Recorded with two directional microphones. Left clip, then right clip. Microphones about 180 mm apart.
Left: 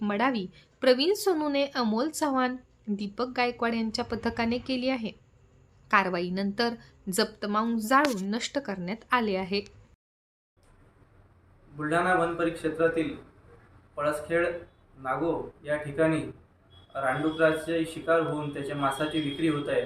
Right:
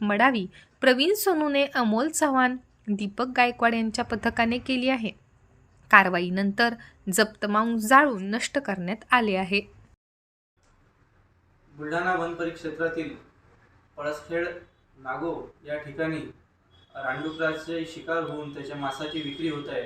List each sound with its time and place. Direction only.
0.0 s a woman's voice: 20° right (ahead or behind)
11.9 s a man's voice: centre (ahead or behind)